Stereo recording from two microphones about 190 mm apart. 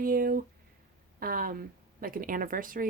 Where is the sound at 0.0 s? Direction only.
50° right (ahead or behind).